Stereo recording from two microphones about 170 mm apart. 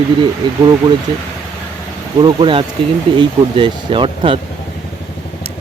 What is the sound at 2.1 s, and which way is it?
Speech, 30° right (ahead or behind).